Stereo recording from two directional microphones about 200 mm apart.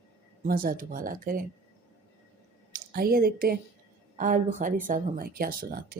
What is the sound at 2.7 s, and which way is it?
A woman's voice, 50° right (ahead or behind).